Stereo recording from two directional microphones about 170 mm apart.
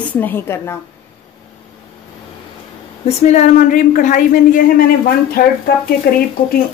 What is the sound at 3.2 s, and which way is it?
A woman's voice, 40° left (ahead or behind).